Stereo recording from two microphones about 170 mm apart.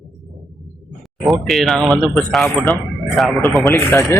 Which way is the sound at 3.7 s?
15° left (ahead or behind).